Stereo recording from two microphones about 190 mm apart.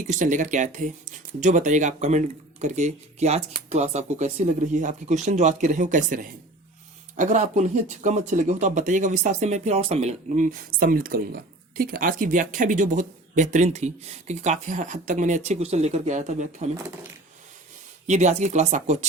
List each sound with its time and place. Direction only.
0.0 s speech: 40° right (ahead or behind)
18.0 s speech: 40° right (ahead or behind)